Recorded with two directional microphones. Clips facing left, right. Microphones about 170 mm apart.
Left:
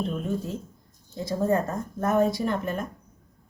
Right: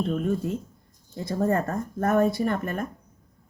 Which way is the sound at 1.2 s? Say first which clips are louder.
Even; 60° right (ahead or behind).